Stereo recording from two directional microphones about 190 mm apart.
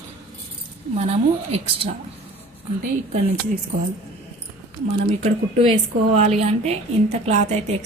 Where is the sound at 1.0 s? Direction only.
35° right (ahead or behind).